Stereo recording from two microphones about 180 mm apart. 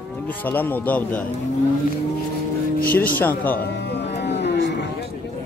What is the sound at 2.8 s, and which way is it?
Speech, 10° left (ahead or behind).